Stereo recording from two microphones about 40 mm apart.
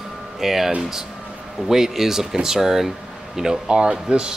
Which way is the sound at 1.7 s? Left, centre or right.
Centre.